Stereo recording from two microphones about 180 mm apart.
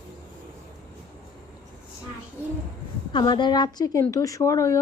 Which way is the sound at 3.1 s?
25° left (ahead or behind).